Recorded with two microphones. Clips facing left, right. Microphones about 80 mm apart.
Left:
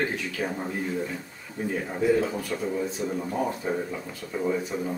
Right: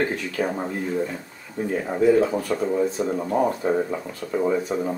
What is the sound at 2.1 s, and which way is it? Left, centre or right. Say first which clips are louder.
Speech: right 6 dB; right.